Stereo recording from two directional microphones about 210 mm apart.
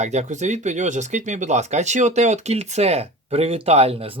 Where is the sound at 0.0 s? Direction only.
30° right (ahead or behind).